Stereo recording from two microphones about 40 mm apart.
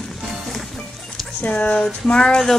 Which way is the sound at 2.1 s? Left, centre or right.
Left.